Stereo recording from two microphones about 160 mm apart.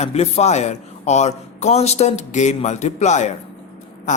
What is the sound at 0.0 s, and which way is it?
Speech, 40° left (ahead or behind).